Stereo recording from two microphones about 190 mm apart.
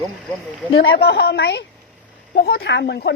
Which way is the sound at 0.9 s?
60° left (ahead or behind).